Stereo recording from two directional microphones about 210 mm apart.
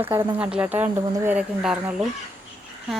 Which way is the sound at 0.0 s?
10° right (ahead or behind).